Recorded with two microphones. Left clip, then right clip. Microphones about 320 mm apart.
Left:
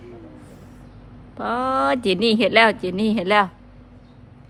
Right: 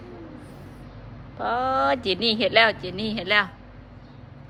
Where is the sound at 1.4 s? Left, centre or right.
Centre.